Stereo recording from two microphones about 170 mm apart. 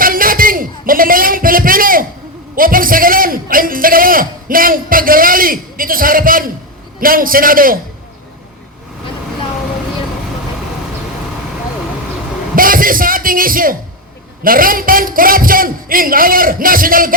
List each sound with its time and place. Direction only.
0.0 s a sound: 55° right (ahead or behind)
7.0 s a man's voice: 55° right (ahead or behind)
12.5 s music: 55° right (ahead or behind)
14.4 s a man's voice: 55° right (ahead or behind)